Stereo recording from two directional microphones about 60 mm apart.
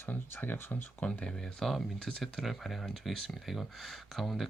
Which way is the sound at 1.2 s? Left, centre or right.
Centre.